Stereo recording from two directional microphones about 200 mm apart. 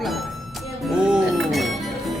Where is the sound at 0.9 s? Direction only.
5° right (ahead or behind).